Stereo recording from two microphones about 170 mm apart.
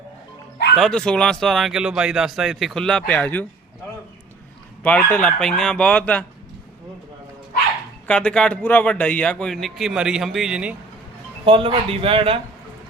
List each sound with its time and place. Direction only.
0.8 s speech: 5° left (ahead or behind)
4.8 s speech: 10° left (ahead or behind)
8.0 s speech: 5° left (ahead or behind)
11.4 s speech: 30° right (ahead or behind)